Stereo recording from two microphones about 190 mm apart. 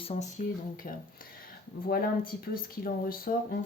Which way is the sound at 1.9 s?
50° left (ahead or behind).